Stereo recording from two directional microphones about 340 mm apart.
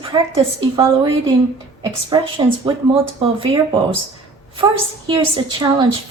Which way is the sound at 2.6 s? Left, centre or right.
Centre.